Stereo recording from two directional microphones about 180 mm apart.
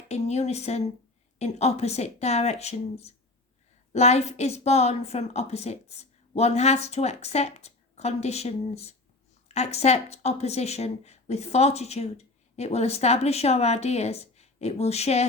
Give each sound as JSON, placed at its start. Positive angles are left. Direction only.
{"t": 0.1, "sound": "speech", "side_deg": 40}